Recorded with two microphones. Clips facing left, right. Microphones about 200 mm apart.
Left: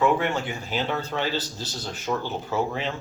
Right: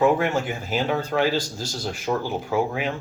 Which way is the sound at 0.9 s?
10° right (ahead or behind).